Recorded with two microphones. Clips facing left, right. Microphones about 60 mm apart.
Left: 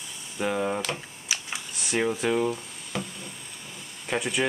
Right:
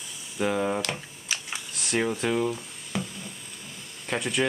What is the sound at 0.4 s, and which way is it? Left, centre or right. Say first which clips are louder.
Computer keyboard: right 1 dB; centre.